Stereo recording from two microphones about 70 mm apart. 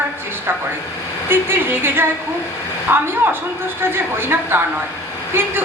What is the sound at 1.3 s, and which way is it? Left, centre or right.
A woman's voice, right.